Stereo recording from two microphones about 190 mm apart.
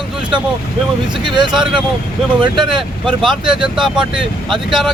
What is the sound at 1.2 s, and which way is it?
Speech, 25° right (ahead or behind).